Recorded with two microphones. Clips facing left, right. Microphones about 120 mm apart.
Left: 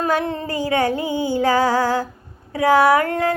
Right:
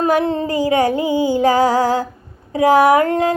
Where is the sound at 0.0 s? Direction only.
20° right (ahead or behind).